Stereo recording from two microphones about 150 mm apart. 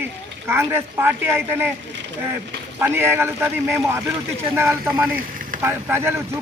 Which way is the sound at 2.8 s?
15° right (ahead or behind).